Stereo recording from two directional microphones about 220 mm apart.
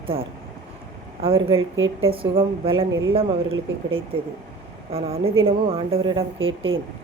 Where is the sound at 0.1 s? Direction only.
25° right (ahead or behind).